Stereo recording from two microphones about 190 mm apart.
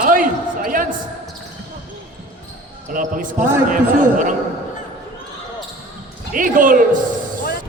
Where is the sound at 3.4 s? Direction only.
10° right (ahead or behind).